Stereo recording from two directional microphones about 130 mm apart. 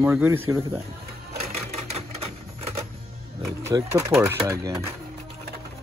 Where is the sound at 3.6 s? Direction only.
20° right (ahead or behind).